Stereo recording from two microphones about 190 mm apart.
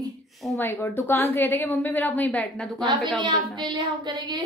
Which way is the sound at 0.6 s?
10° left (ahead or behind).